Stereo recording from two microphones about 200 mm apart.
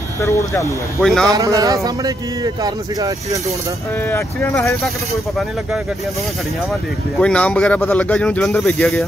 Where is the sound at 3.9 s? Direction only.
10° left (ahead or behind).